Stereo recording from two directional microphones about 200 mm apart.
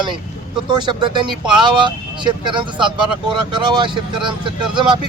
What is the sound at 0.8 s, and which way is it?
Speech, 25° right (ahead or behind).